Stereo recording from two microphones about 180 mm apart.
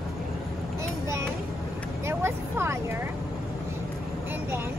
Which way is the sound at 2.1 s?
15° right (ahead or behind).